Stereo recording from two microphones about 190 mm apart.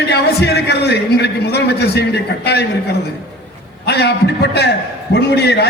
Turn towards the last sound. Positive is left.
turn(degrees=60)  # may be behind; listen again after turning